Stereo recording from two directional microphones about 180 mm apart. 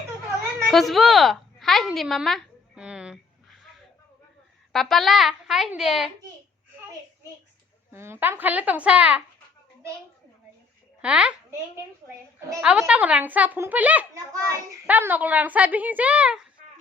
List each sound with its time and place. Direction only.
0.7 s a sound: centre (ahead or behind)
4.7 s a woman's voice: centre (ahead or behind)
7.9 s a child's voice: 15° right (ahead or behind)
11.0 s a child's voice: 5° right (ahead or behind)